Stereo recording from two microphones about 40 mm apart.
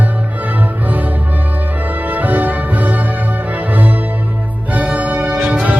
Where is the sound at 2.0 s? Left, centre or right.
Right.